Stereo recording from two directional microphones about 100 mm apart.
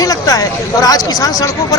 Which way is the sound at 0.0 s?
35° left (ahead or behind).